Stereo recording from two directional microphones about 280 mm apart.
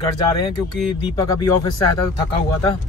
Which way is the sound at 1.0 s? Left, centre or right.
Centre.